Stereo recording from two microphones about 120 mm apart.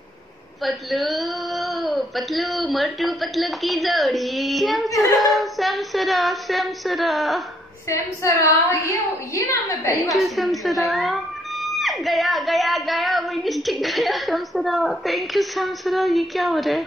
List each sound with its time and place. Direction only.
0.7 s speech: centre (ahead or behind)
7.9 s a woman's voice: 25° left (ahead or behind)
10.1 s speech: centre (ahead or behind)